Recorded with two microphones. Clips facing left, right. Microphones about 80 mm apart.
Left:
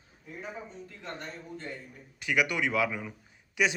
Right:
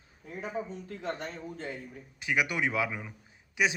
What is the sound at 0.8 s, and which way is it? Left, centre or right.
Speech, right.